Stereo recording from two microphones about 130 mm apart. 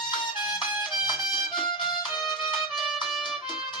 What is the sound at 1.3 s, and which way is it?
Music, 40° left (ahead or behind).